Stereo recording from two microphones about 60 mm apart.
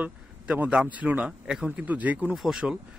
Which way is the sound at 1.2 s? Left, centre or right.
Centre.